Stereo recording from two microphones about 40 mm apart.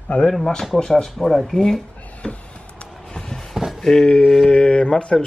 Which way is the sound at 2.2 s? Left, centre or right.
Left.